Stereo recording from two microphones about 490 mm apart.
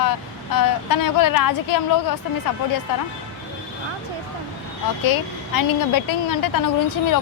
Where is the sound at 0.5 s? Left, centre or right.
Left.